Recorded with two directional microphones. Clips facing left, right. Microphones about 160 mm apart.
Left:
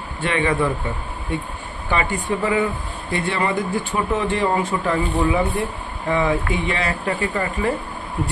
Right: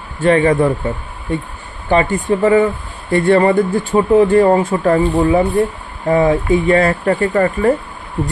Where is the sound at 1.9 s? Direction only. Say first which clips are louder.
Right 8 dB; 40° right (ahead or behind).